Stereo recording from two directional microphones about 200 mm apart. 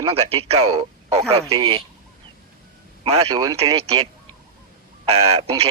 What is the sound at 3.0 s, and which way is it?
Speech, 25° right (ahead or behind).